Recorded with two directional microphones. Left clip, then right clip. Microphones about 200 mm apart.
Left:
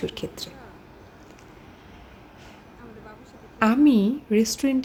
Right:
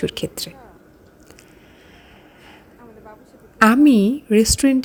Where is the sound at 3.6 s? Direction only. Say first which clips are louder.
Right 6 dB; 35° right (ahead or behind).